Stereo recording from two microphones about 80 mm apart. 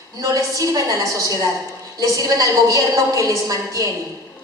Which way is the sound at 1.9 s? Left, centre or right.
Right.